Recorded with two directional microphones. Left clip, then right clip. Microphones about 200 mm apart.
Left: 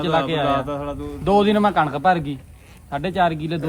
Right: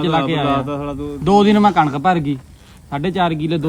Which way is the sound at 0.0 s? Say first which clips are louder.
Right 2 dB; 50° right (ahead or behind).